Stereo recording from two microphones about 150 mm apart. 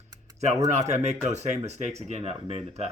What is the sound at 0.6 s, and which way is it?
Speech, 50° right (ahead or behind).